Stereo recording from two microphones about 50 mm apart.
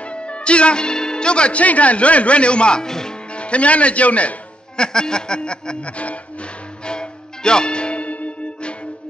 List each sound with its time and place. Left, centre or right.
0.0 s speech: left
3.3 s speech: left
4.8 s speech: centre
6.9 s music: centre